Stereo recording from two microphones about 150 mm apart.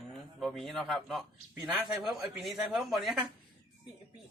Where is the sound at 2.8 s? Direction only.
Centre (ahead or behind).